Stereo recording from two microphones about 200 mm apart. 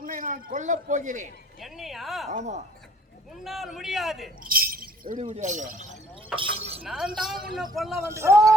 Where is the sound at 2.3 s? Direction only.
35° right (ahead or behind).